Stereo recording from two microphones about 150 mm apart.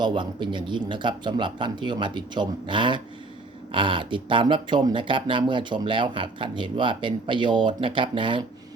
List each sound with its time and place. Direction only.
0.0 s speech: 30° right (ahead or behind)